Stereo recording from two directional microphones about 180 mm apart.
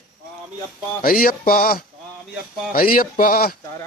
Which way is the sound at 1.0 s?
50° left (ahead or behind).